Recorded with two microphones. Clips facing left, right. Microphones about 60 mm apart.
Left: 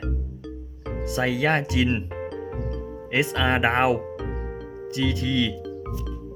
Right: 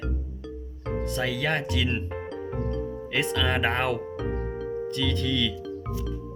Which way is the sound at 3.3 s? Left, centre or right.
Left.